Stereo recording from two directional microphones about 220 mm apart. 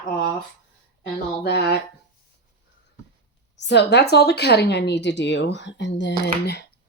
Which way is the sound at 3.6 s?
50° left (ahead or behind).